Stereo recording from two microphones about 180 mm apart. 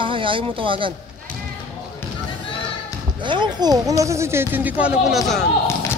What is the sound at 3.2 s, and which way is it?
Speech, 25° right (ahead or behind).